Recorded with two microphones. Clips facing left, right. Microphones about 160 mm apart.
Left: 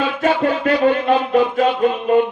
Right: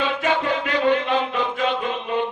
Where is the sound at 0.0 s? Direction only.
40° left (ahead or behind).